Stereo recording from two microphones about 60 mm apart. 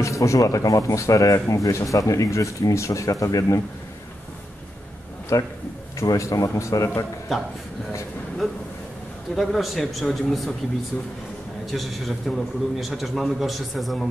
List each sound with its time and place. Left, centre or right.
0.0 s speech: left
5.3 s speech: left
9.3 s a man's voice: centre
11.7 s a man's voice: centre